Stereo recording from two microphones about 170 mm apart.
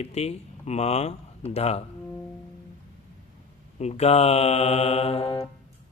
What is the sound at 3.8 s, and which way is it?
A man's voice, 40° left (ahead or behind).